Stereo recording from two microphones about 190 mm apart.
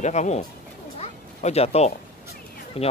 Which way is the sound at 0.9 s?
35° left (ahead or behind).